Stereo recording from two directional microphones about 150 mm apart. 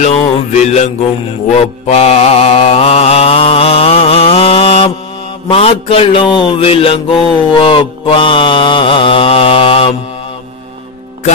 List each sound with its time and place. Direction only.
0.0 s music: 50° left (ahead or behind)
1.6 s mantra: 45° left (ahead or behind)